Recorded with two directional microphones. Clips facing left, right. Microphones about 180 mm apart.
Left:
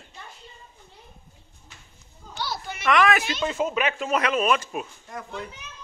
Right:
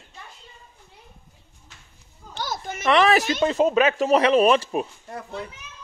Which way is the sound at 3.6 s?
35° right (ahead or behind).